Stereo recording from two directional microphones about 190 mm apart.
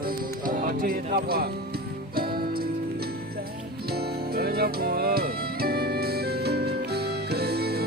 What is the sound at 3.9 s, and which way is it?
Music, 55° right (ahead or behind).